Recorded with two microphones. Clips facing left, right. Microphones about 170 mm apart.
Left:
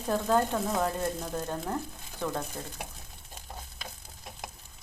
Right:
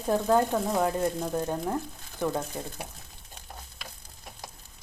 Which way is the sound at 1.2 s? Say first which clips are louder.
Right 5 dB; 15° right (ahead or behind).